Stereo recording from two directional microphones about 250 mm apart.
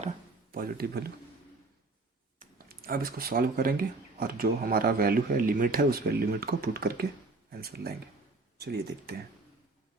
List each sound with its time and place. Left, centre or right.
0.5 s speech: right
2.4 s speech: right